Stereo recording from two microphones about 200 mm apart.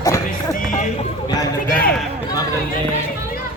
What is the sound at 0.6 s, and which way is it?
Speech, 40° left (ahead or behind).